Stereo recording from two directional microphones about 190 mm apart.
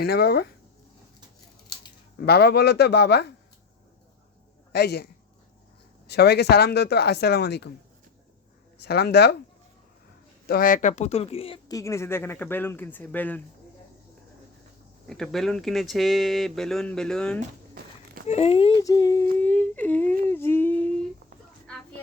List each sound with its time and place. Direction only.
0.0 s speech: 55° left (ahead or behind)
2.1 s speech: 55° left (ahead or behind)
4.7 s speech: 60° left (ahead or behind)
6.1 s speech: 60° left (ahead or behind)
8.8 s speech: 60° left (ahead or behind)
10.4 s speech: 50° left (ahead or behind); by 11.8 s 30° left (ahead or behind)
11.8 s speech: 15° left (ahead or behind)
15.1 s speech: centre (ahead or behind)
18.3 s speech: 30° left (ahead or behind)
18.8 s speech: 20° left (ahead or behind)
20.3 s a sound: 10° left (ahead or behind)